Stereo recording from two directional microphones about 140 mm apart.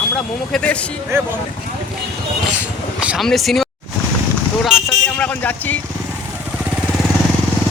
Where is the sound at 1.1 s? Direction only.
20° right (ahead or behind).